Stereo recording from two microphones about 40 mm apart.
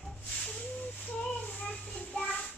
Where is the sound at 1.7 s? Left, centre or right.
Left.